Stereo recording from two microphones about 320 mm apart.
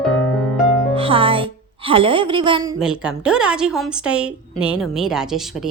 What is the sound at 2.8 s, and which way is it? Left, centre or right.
A woman's voice, centre.